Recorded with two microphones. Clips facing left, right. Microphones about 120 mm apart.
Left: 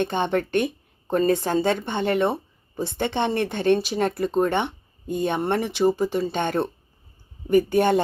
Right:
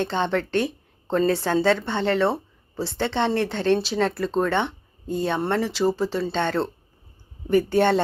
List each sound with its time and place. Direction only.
0.0 s a woman's voice: 15° left (ahead or behind)